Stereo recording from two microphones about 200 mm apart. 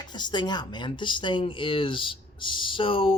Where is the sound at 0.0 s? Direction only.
20° left (ahead or behind).